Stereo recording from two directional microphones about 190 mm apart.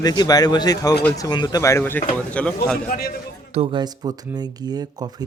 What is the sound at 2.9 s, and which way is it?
Speech, 50° left (ahead or behind).